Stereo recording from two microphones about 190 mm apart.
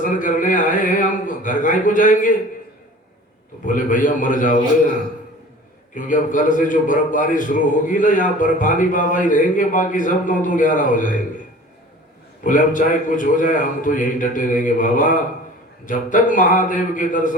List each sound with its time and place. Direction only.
0.0 s a man's voice: 45° left (ahead or behind)
3.7 s a man's voice: 45° left (ahead or behind)
5.9 s a man's voice: 45° left (ahead or behind)
12.4 s a man's voice: 45° left (ahead or behind)